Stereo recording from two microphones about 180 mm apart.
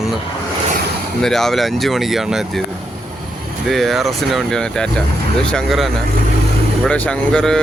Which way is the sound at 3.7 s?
Centre (ahead or behind).